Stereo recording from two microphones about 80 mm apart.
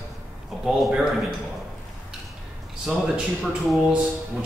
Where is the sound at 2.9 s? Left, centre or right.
Centre.